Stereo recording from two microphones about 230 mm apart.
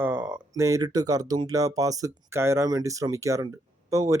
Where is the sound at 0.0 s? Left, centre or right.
Centre.